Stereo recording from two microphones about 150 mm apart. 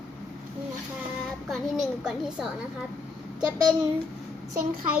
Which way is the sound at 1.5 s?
Centre (ahead or behind).